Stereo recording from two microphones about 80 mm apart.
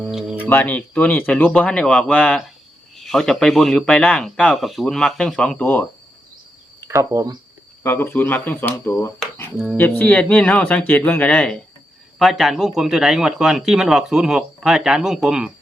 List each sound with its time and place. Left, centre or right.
0.1 s music: centre
0.4 s speech: left
6.8 s speech: right
7.9 s speech: left; by 11.6 s centre
12.2 s speech: centre